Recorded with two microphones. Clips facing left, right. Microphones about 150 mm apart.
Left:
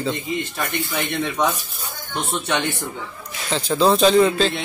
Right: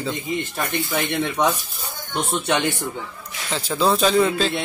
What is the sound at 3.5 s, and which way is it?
Speech, 5° right (ahead or behind).